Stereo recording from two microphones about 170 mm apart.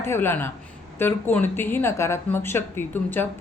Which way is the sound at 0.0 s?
15° left (ahead or behind).